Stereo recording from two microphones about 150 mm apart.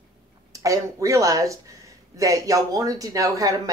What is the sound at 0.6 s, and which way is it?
Speech, 20° right (ahead or behind).